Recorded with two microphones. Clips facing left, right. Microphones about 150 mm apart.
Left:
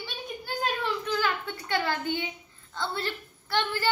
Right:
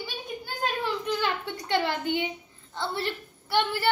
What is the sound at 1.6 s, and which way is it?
Speech, 25° right (ahead or behind).